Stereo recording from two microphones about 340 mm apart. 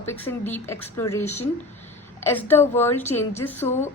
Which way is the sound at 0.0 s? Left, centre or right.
Centre.